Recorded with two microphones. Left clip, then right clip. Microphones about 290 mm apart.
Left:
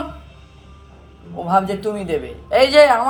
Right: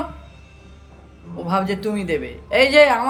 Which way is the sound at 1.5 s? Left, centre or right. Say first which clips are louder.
Left 4 dB; centre.